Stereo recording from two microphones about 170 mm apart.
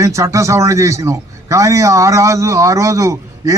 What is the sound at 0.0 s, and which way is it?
A man's voice, 20° right (ahead or behind).